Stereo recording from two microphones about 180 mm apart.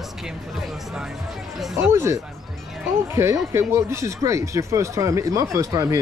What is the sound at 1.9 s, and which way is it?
Speech, 15° right (ahead or behind).